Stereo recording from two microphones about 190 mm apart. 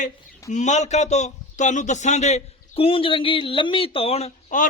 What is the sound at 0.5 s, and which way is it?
A man's voice, 40° left (ahead or behind).